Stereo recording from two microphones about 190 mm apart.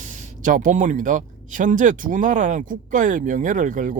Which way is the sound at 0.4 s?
45° right (ahead or behind).